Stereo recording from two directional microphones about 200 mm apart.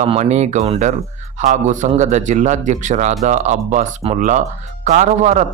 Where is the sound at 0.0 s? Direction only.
35° right (ahead or behind).